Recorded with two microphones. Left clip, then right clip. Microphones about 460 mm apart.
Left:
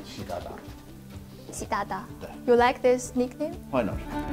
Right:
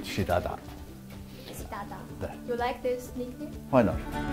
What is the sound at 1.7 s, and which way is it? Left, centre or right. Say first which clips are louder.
A woman's voice: left 11 dB; left.